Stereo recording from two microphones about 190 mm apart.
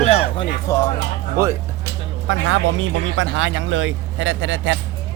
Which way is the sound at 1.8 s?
80° right.